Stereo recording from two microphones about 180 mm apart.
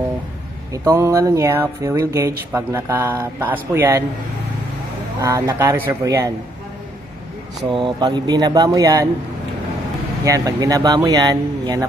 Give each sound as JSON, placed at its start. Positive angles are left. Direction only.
{"t": 0.8, "sound": "speech", "side_deg": -15}
{"t": 5.2, "sound": "speech", "side_deg": -15}
{"t": 7.7, "sound": "speech", "side_deg": -25}
{"t": 10.2, "sound": "speech", "side_deg": -20}